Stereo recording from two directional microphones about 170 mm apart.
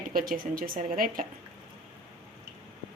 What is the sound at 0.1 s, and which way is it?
Speech, 60° right (ahead or behind).